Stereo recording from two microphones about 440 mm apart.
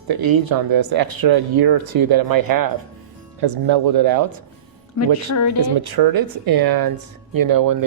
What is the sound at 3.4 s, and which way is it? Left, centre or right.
Speech, right.